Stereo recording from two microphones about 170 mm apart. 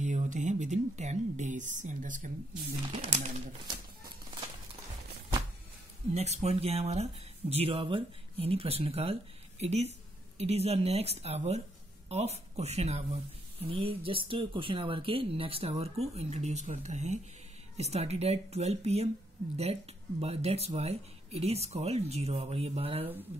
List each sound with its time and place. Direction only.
0.0 s speech: 45° right (ahead or behind)
2.9 s speech: 40° right (ahead or behind)
6.1 s speech: 40° right (ahead or behind)